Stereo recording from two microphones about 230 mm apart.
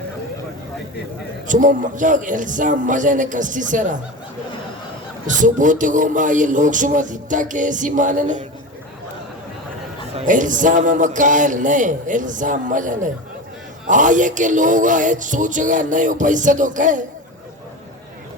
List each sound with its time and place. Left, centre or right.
1.5 s speech: right
5.2 s speech: right
10.2 s speech: right